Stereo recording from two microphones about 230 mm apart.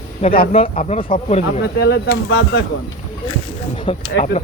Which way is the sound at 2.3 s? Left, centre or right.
Left.